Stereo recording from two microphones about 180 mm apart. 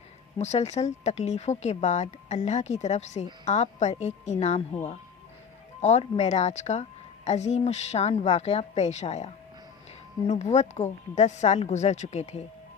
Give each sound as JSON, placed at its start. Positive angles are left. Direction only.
{"t": 0.3, "sound": "speech", "side_deg": 35}